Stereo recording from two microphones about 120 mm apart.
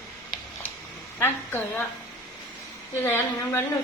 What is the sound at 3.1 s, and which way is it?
Speech, 20° left (ahead or behind).